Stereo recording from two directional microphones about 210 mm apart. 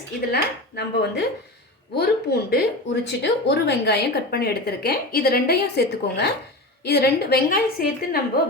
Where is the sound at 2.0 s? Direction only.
50° left (ahead or behind).